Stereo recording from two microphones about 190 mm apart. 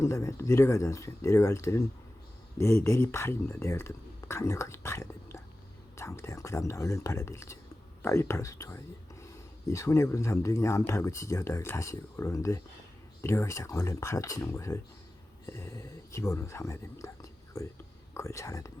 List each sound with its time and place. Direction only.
0.0 s speech: 15° left (ahead or behind)